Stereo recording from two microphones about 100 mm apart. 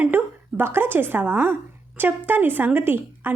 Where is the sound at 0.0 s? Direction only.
20° right (ahead or behind).